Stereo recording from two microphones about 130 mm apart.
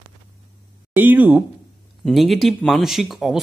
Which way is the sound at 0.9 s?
15° right (ahead or behind).